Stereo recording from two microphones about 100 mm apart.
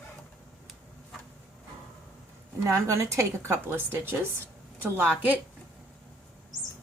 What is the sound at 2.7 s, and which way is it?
A woman's voice, 30° right (ahead or behind).